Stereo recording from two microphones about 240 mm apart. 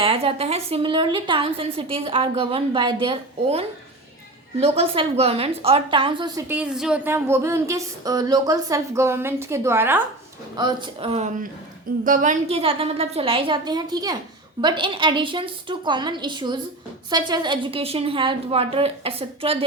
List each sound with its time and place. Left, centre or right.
0.0 s a woman's voice: right